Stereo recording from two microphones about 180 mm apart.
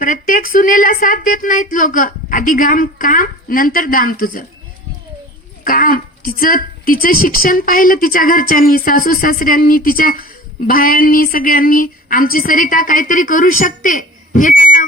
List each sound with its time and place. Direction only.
0.0 s speech: 50° left (ahead or behind)
5.6 s speech: 50° left (ahead or behind)